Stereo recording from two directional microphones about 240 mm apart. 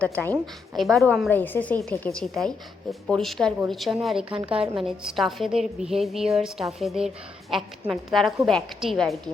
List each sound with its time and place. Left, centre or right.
0.0 s a woman's voice: centre
4.5 s a woman's voice: right
4.8 s a woman's voice: centre